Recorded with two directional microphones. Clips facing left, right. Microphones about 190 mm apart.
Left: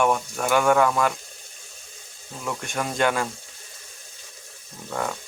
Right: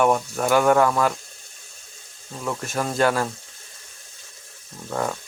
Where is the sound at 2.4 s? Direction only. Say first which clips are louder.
Right 2 dB; centre (ahead or behind).